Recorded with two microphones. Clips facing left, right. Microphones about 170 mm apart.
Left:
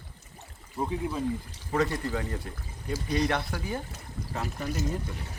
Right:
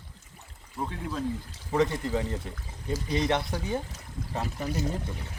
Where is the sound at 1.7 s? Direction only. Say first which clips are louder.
Right 2 dB; 20° right (ahead or behind).